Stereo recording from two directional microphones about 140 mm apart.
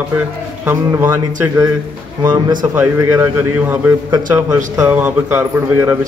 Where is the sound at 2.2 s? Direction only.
30° right (ahead or behind).